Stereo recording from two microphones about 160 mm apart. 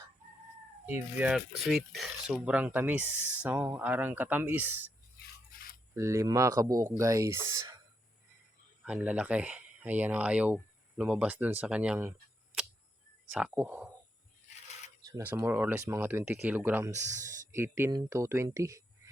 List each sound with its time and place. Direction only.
0.9 s speech: 10° right (ahead or behind)
5.9 s speech: 20° right (ahead or behind)
8.8 s speech: 10° right (ahead or behind)
13.3 s speech: 5° right (ahead or behind)
15.4 s speech: 10° right (ahead or behind)